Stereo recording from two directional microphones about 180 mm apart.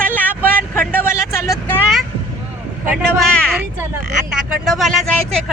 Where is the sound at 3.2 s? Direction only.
5° left (ahead or behind).